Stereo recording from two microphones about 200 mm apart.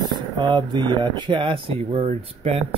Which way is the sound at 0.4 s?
20° right (ahead or behind).